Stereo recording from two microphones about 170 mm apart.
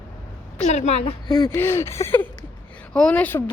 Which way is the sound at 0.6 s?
40° left (ahead or behind).